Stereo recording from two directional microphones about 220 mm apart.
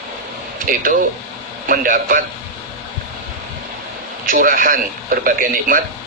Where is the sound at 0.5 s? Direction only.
35° right (ahead or behind).